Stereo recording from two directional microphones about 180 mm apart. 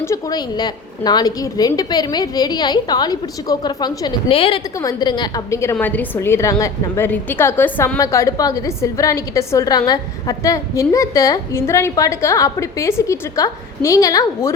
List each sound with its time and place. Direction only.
0.0 s a woman's voice: 20° left (ahead or behind)
4.8 s a woman's voice: 20° left (ahead or behind)